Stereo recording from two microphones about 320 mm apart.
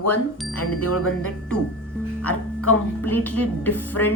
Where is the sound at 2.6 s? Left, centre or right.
Left.